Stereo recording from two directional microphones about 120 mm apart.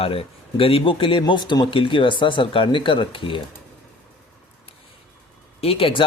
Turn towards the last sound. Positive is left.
turn(degrees=50)  # may be behind; listen again after turning